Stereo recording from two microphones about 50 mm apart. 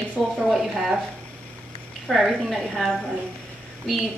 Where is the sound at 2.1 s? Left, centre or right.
Centre.